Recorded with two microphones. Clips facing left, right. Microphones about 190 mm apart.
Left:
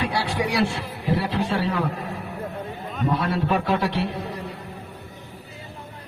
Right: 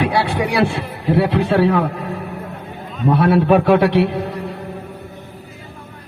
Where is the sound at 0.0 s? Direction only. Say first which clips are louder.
Right 6 dB; 60° right (ahead or behind).